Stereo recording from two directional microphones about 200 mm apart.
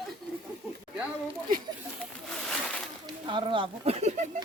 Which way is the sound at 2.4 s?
Centre (ahead or behind).